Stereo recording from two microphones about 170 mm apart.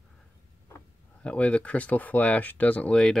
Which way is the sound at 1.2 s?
5° left (ahead or behind).